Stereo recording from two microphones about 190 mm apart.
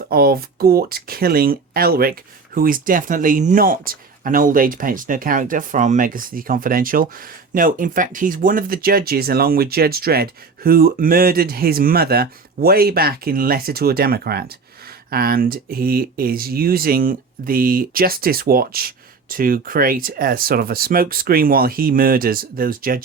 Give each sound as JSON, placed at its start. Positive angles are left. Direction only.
{"t": 0.1, "sound": "speech", "side_deg": -50}